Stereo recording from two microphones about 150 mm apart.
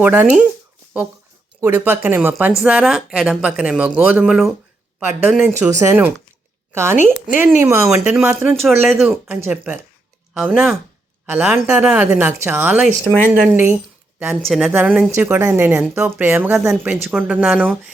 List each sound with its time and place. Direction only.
0.0 s speech: 10° right (ahead or behind)
1.6 s speech: 15° right (ahead or behind)
6.9 s speech: 55° left (ahead or behind)
7.3 s speech: 15° right (ahead or behind)
8.6 s speech: centre (ahead or behind)
11.3 s speech: 10° right (ahead or behind)
14.4 s speech: centre (ahead or behind)
14.7 s speech: 10° right (ahead or behind)